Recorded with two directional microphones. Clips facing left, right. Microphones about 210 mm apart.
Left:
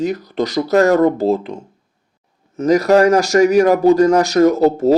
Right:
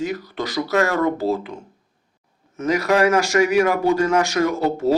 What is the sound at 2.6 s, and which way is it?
Speech, 40° left (ahead or behind).